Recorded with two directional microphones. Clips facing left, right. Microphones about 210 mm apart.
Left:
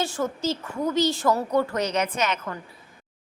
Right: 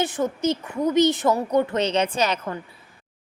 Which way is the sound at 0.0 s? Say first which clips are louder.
Right 3 dB; 20° right (ahead or behind).